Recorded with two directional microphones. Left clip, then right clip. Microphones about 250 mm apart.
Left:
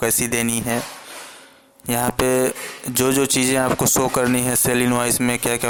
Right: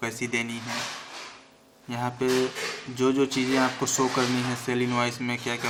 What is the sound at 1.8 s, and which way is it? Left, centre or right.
Speech, left.